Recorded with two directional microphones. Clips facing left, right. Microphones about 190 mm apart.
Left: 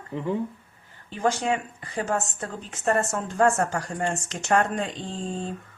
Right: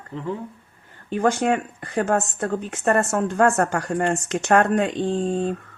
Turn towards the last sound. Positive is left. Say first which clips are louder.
# right 9 dB
turn(degrees=-60)  # may be behind; listen again after turning